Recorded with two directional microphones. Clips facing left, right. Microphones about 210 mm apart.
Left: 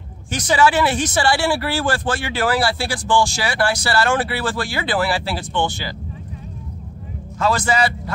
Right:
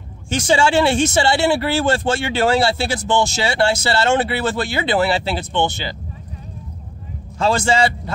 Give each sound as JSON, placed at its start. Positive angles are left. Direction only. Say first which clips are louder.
{"t": 0.3, "sound": "speech", "louder": "right 1 dB", "side_deg": -25}
{"t": 7.3, "sound": "speech", "louder": "right 2 dB", "side_deg": -25}